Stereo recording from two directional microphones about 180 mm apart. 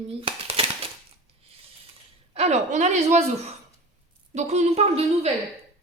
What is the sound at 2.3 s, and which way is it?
Speech, 35° right (ahead or behind).